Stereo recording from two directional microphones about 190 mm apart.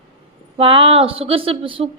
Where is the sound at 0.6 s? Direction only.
30° right (ahead or behind).